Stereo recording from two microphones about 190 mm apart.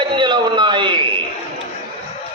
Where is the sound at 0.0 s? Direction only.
25° right (ahead or behind).